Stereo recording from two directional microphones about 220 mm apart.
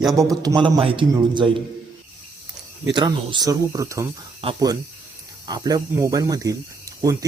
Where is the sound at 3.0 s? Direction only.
20° right (ahead or behind).